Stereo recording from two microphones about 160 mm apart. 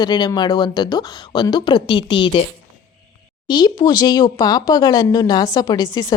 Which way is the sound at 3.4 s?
25° left (ahead or behind).